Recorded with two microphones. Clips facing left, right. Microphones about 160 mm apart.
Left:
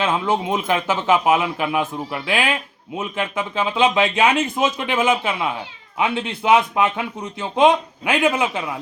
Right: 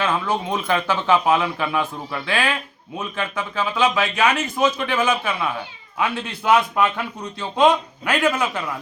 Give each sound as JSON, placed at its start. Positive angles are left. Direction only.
{"t": 0.0, "sound": "a man's voice", "side_deg": 20}